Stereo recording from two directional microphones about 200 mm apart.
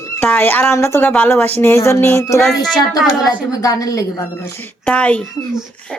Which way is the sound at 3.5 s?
20° left (ahead or behind).